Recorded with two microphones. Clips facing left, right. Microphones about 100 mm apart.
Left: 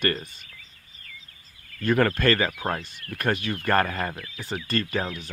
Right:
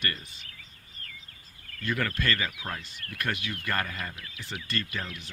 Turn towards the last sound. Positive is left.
turn(degrees=50)  # may be behind; listen again after turning